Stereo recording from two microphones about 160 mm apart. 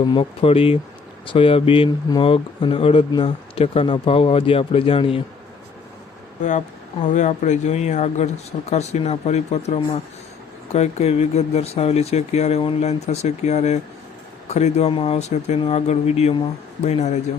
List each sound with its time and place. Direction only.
0.0 s speech: 35° left (ahead or behind)
7.0 s speech: 50° left (ahead or behind)